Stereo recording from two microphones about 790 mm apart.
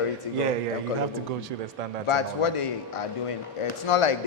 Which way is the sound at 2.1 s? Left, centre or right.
Left.